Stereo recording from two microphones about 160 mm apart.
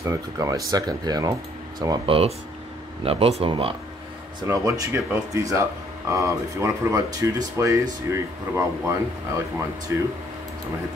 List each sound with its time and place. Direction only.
0.0 s speech: 20° right (ahead or behind)
4.4 s speech: 20° right (ahead or behind)